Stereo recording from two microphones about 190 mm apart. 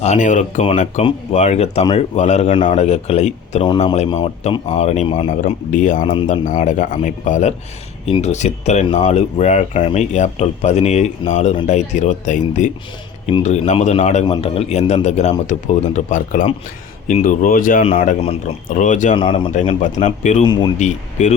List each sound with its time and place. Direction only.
0.0 s speech: 40° left (ahead or behind)
5.5 s speech: 40° left (ahead or behind)
19.1 s speech: 25° left (ahead or behind)
20.4 s speech: 20° left (ahead or behind)
20.7 s speech: 40° left (ahead or behind)